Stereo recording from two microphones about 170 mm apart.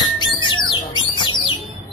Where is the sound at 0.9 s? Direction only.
25° left (ahead or behind).